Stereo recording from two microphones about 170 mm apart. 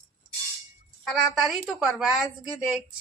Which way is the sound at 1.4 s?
Centre (ahead or behind).